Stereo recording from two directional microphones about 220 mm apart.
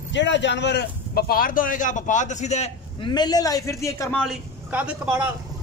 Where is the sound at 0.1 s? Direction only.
55° left (ahead or behind); by 4.2 s 15° left (ahead or behind).